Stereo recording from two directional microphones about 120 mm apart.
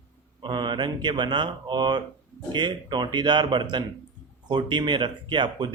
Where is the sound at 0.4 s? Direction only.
40° right (ahead or behind).